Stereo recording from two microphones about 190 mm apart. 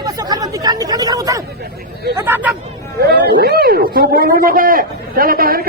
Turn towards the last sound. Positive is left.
turn(degrees=-50)  # may be behind; listen again after turning